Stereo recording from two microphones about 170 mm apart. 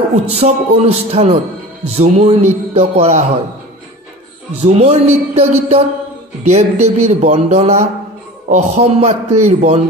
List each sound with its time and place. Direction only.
0.3 s speech: 35° right (ahead or behind)
4.6 s a man's voice: 40° right (ahead or behind)